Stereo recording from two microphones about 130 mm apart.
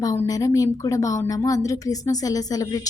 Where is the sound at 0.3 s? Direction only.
25° left (ahead or behind).